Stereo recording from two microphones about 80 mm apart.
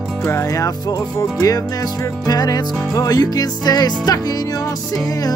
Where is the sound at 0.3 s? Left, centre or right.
Left.